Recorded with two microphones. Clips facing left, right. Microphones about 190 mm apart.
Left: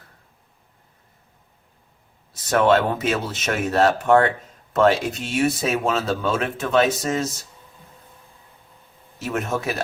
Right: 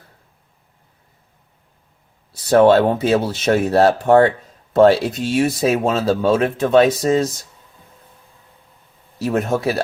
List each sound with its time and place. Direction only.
2.3 s speech: 35° right (ahead or behind)
9.1 s speech: 35° right (ahead or behind)